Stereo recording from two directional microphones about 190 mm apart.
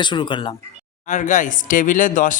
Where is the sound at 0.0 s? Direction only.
25° left (ahead or behind).